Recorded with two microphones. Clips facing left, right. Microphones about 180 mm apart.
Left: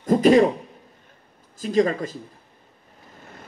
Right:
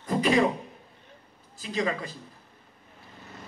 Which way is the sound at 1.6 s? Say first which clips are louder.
Left 9 dB; 45° left (ahead or behind).